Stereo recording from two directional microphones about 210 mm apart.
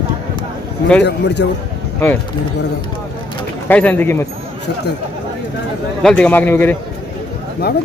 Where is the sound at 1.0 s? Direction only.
55° left (ahead or behind).